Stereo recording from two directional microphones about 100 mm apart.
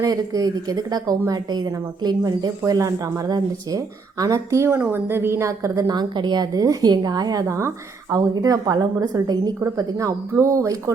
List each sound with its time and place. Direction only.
0.0 s a woman's voice: 40° right (ahead or behind)